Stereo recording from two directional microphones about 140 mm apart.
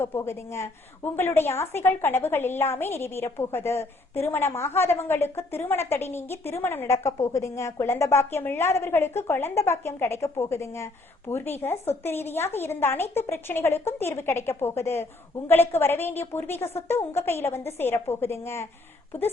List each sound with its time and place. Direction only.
0.0 s a woman's voice: 20° left (ahead or behind)